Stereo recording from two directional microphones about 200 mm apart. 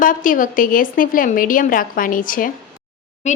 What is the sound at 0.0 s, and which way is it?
A woman's voice, 40° left (ahead or behind).